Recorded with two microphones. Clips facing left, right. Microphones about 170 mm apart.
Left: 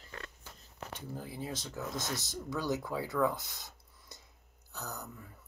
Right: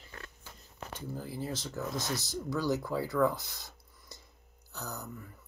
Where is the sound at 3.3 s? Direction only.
20° left (ahead or behind).